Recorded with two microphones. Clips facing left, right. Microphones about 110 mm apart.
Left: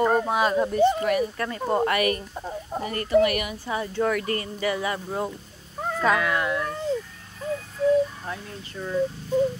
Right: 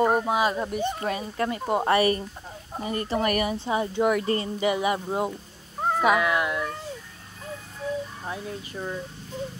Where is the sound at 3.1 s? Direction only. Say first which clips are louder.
Left 5 dB; 40° right (ahead or behind).